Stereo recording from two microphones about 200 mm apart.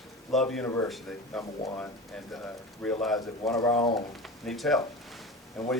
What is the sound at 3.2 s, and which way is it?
Speech, 15° left (ahead or behind).